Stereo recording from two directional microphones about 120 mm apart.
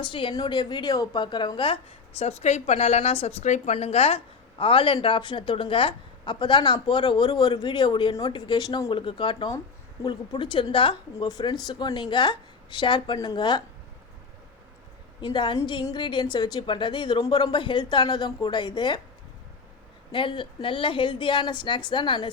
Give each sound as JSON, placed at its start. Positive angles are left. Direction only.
{"t": 0.0, "sound": "a woman's voice", "side_deg": 45}
{"t": 11.3, "sound": "a woman's voice", "side_deg": 30}
{"t": 15.2, "sound": "a woman's voice", "side_deg": 40}
{"t": 20.1, "sound": "a woman's voice", "side_deg": 45}